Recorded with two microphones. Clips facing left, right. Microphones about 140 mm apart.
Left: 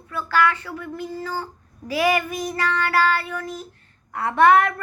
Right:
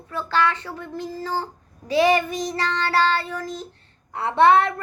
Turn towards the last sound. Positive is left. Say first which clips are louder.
# even
turn(degrees=-25)  # may be behind; listen again after turning